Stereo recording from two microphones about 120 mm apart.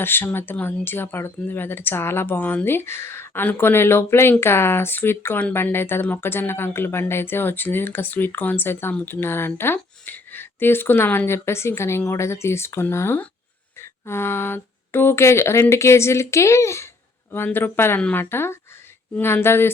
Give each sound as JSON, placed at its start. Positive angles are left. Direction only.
{"t": 0.0, "sound": "speech", "side_deg": 20}